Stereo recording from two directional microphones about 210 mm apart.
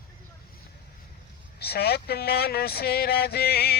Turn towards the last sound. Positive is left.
turn(degrees=50)  # may be behind; listen again after turning